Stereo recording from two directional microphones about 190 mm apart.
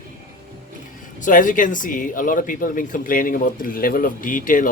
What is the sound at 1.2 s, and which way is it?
Speech, 45° left (ahead or behind).